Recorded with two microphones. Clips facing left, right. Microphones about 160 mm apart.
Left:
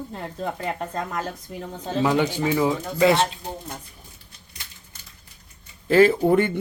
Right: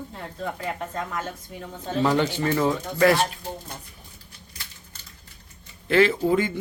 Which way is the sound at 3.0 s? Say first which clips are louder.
Left 1 dB; 20° left (ahead or behind).